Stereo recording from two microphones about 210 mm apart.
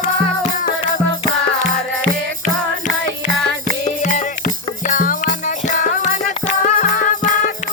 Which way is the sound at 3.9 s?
35° left (ahead or behind).